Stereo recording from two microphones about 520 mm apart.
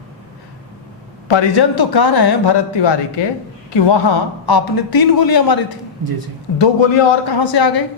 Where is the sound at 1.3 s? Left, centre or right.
Left.